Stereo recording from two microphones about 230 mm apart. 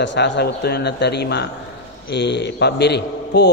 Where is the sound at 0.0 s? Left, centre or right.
Left.